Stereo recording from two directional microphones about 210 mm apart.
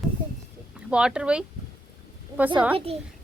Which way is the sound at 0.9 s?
5° right (ahead or behind).